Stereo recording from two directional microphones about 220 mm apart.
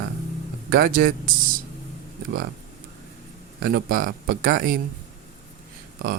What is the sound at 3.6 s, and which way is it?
Speech, 45° right (ahead or behind).